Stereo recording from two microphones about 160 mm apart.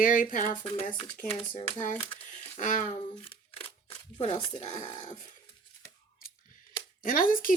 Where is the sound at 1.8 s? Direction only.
50° left (ahead or behind).